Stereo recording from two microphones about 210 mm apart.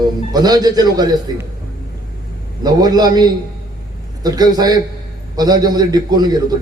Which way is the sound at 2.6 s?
20° right (ahead or behind).